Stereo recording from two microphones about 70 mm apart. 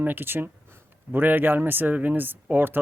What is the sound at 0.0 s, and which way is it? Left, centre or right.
A man's voice, right.